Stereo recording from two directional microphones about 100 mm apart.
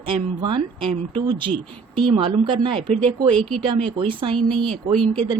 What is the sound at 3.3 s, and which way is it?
Speech, 5° left (ahead or behind).